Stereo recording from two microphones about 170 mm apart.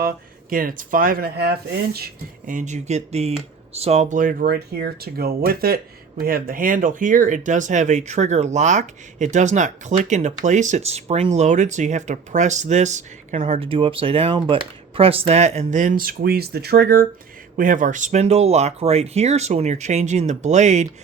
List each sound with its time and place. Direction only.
0.5 s speech: 55° right (ahead or behind)
2.5 s speech: 45° right (ahead or behind)
13.6 s speech: 30° right (ahead or behind)